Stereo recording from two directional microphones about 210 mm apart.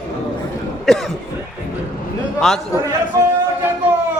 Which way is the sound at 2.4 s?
Centre (ahead or behind).